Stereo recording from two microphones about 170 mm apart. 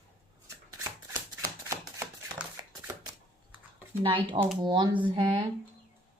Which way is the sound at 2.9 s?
20° right (ahead or behind).